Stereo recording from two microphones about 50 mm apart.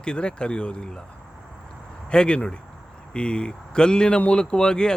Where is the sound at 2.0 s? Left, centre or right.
Centre.